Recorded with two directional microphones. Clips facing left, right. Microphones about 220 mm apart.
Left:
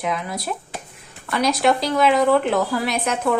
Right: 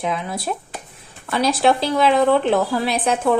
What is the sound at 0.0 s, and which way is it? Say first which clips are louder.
A woman's voice: right 1 dB; 30° right (ahead or behind).